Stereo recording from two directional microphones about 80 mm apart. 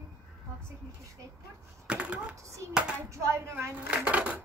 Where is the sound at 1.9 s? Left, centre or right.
Centre.